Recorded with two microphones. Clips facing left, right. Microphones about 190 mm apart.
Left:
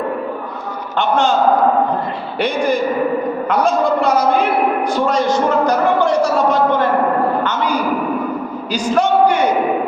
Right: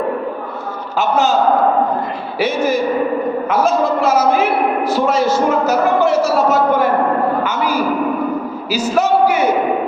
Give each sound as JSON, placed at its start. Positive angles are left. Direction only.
{"t": 0.9, "sound": "a man's voice", "side_deg": -5}
{"t": 2.4, "sound": "a man's voice", "side_deg": -5}